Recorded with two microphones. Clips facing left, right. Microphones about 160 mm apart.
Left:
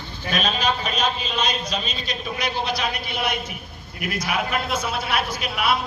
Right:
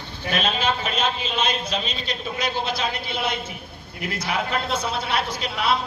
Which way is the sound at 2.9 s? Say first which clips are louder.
Even; 15° left (ahead or behind).